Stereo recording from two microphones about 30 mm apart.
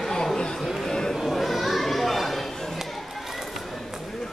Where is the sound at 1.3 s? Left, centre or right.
Centre.